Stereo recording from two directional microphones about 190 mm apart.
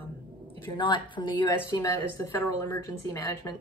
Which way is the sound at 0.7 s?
25° left (ahead or behind).